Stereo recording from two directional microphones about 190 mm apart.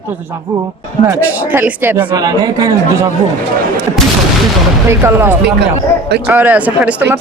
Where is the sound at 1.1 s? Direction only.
10° right (ahead or behind).